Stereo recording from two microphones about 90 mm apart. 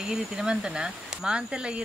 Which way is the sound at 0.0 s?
5° right (ahead or behind).